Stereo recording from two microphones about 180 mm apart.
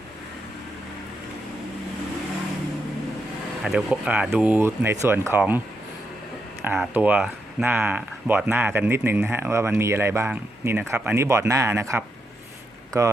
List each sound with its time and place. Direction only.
3.6 s speech: centre (ahead or behind)
6.9 s speech: 10° right (ahead or behind)